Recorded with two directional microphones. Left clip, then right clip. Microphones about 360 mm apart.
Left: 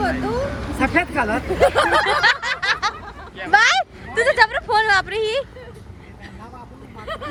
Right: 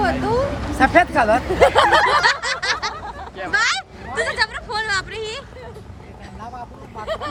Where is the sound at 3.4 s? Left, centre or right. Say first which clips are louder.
Left 5 dB; centre.